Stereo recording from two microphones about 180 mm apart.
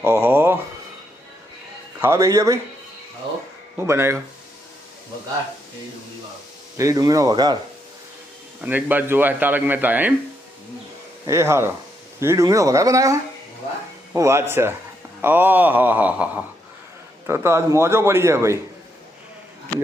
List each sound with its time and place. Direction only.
0.0 s speech: 15° right (ahead or behind)
2.0 s speech: 15° right (ahead or behind)
3.8 s speech: 15° right (ahead or behind)
6.7 s speech: 20° right (ahead or behind)
8.6 s speech: 10° right (ahead or behind)
11.3 s speech: 15° right (ahead or behind)